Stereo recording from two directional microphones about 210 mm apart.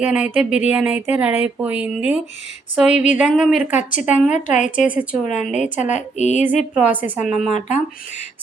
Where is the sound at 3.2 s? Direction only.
Centre (ahead or behind).